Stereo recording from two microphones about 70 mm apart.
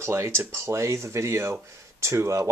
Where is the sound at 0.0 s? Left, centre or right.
Right.